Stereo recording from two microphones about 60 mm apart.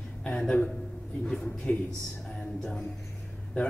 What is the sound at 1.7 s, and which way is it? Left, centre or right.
Speech, centre.